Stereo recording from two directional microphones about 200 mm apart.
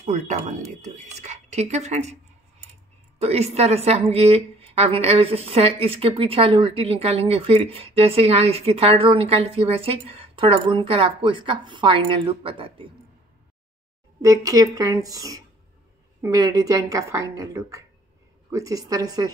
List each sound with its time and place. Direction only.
0.0 s speech: 35° right (ahead or behind)
3.2 s a woman's voice: 30° right (ahead or behind)
14.2 s speech: 15° right (ahead or behind)